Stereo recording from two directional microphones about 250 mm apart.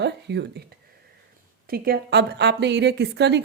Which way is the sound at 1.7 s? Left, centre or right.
Right.